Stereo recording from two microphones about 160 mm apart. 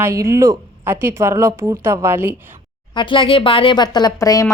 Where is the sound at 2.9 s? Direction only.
30° left (ahead or behind).